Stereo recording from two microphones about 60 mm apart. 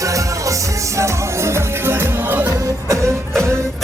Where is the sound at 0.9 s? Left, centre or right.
Right.